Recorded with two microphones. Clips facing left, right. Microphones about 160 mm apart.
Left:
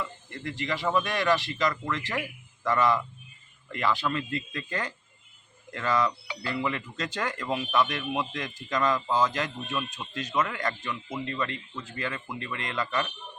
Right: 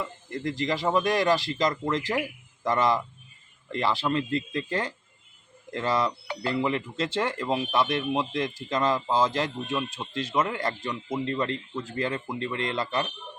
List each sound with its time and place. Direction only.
0.3 s speech: 35° right (ahead or behind)